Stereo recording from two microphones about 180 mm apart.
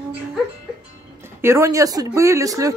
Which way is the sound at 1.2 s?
15° right (ahead or behind).